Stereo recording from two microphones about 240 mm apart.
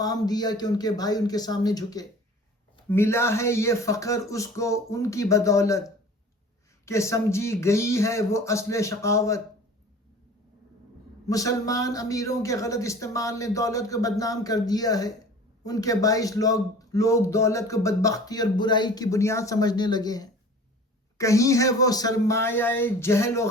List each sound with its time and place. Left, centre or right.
0.0 s speech: centre
6.8 s speech: centre
11.3 s speech: centre